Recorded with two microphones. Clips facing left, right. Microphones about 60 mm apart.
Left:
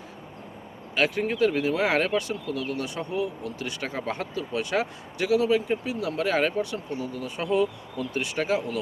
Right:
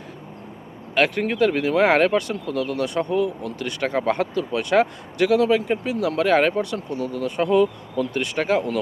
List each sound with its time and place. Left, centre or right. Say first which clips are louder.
0.9 s speech: right 4 dB; right